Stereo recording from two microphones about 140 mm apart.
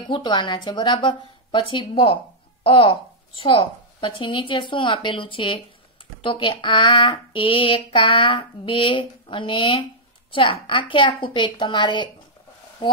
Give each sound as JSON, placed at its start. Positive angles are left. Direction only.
{"t": 0.1, "sound": "speech", "side_deg": 35}